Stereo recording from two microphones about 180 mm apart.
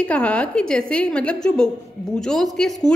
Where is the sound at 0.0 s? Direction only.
5° left (ahead or behind).